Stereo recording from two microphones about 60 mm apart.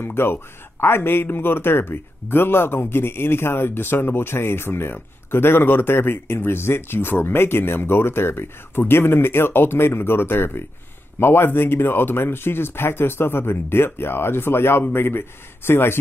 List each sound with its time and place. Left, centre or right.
0.0 s speech: left